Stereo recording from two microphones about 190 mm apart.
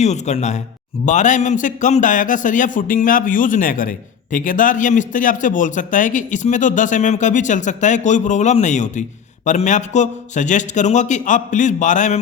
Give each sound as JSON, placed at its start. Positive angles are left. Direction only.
{"t": 0.0, "sound": "a man's voice", "side_deg": 35}